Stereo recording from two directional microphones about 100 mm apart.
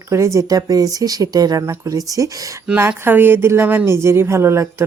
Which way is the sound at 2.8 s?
20° right (ahead or behind).